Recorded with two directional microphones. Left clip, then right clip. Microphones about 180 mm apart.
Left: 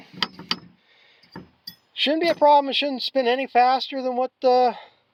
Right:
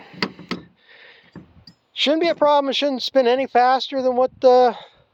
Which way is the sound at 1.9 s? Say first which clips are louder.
Right 3 dB; 20° right (ahead or behind).